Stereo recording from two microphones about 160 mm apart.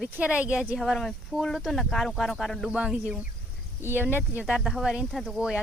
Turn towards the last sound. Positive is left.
turn(degrees=-5)  # may be behind; listen again after turning